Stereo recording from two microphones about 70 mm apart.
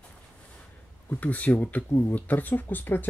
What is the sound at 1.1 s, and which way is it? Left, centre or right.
Speech, left.